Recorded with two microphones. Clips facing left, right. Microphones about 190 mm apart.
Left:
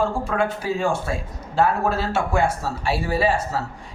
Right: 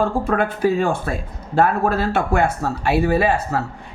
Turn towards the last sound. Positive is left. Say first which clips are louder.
# right 3 dB
turn(degrees=-60)  # may be behind; listen again after turning